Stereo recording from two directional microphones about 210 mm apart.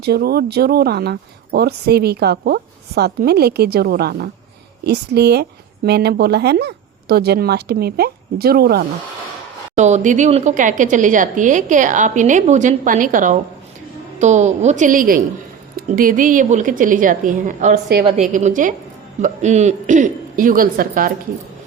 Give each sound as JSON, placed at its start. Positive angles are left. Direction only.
{"t": 0.0, "sound": "speech", "side_deg": -50}
{"t": 9.7, "sound": "a woman's voice", "side_deg": -35}